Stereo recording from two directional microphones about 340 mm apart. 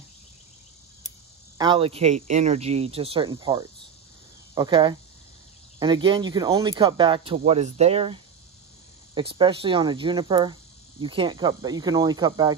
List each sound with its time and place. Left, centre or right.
1.6 s speech: centre